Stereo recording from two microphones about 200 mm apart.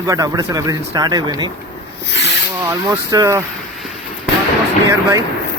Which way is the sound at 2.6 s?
15° right (ahead or behind).